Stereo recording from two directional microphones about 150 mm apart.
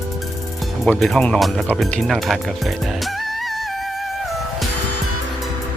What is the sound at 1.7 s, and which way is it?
Music, centre (ahead or behind).